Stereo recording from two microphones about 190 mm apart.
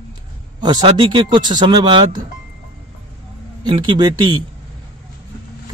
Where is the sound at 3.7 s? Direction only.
25° right (ahead or behind).